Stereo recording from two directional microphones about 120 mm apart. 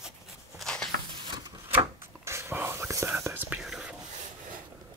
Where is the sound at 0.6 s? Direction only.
5° left (ahead or behind).